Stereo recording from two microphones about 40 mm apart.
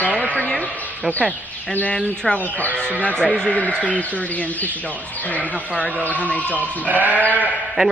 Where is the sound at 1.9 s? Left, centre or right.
Left.